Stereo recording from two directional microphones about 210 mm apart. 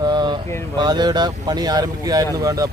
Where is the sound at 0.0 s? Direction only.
20° right (ahead or behind).